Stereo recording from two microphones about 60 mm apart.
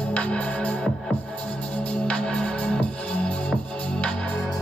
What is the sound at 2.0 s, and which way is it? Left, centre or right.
Music, centre.